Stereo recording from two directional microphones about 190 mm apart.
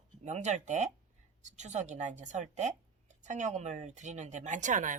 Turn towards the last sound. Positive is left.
turn(degrees=-40)  # may be behind; listen again after turning